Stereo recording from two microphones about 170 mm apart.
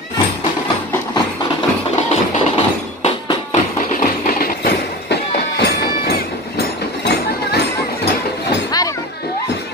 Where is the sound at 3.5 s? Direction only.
50° left (ahead or behind); by 7.7 s 75° left (ahead or behind).